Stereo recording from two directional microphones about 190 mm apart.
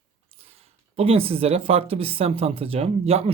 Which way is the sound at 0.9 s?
30° right (ahead or behind).